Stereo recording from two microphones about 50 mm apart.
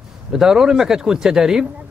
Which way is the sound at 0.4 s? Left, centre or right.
Centre.